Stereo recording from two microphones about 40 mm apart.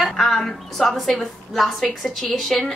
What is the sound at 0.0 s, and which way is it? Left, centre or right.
A woman's voice, centre.